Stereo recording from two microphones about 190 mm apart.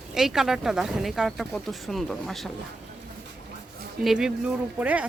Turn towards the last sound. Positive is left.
turn(degrees=-5)  # may be behind; listen again after turning